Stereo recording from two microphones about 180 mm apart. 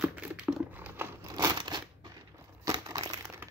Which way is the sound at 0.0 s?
5° right (ahead or behind).